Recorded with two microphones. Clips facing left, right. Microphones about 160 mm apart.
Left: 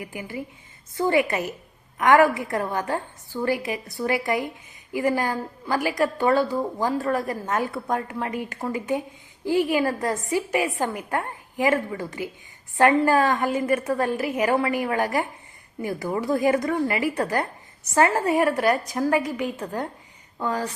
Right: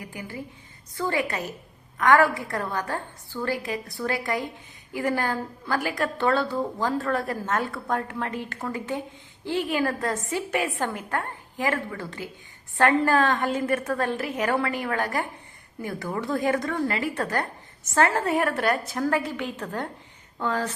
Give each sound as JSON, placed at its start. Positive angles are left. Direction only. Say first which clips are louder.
{"t": 0.1, "sound": "a woman's voice", "louder": "left 3 dB", "side_deg": 15}
{"t": 7.3, "sound": "a woman's voice", "louder": "left 1 dB", "side_deg": 5}
{"t": 9.5, "sound": "a woman's voice", "louder": "left 5 dB", "side_deg": 5}
{"t": 9.8, "sound": "a woman's voice", "louder": "left 2 dB", "side_deg": 20}
{"t": 10.2, "sound": "a woman's voice", "louder": "left 3 dB", "side_deg": 5}
{"t": 13.9, "sound": "a woman's voice", "louder": "left 2 dB", "side_deg": 15}
{"t": 14.2, "sound": "a woman's voice", "louder": "left 3 dB", "side_deg": 0}
{"t": 14.8, "sound": "a woman's voice", "louder": "left 3 dB", "side_deg": 15}
{"t": 17.9, "sound": "a woman's voice", "louder": "left 2 dB", "side_deg": 5}